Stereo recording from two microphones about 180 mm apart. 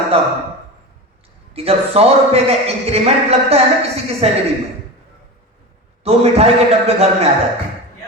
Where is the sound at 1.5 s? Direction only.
35° right (ahead or behind).